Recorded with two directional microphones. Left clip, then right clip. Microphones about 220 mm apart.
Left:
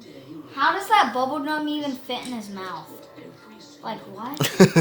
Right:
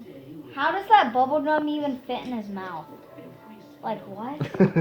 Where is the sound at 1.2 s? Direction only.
10° right (ahead or behind).